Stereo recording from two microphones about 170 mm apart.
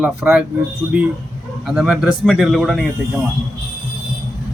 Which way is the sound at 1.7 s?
5° right (ahead or behind).